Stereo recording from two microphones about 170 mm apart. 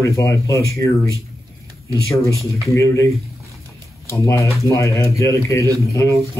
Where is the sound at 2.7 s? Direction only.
15° left (ahead or behind).